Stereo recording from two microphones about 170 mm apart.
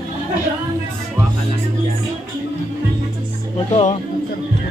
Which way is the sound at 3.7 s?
45° left (ahead or behind).